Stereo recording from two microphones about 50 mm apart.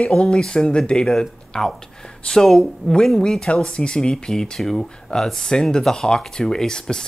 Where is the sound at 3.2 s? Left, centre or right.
Centre.